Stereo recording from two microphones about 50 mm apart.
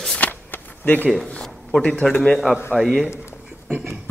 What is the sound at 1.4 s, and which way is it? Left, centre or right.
Speech, centre.